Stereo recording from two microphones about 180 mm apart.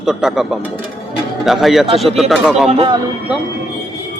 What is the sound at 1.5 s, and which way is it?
Speech, centre (ahead or behind).